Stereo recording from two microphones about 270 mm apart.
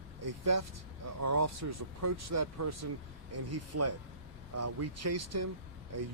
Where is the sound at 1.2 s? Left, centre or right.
Right.